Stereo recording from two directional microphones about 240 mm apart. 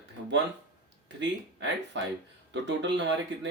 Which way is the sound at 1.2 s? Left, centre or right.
Right.